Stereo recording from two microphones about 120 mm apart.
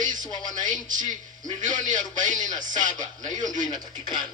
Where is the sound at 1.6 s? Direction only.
90° right.